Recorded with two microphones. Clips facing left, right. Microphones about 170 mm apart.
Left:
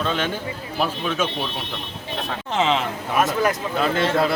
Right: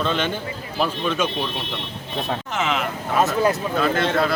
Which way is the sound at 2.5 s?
30° left (ahead or behind).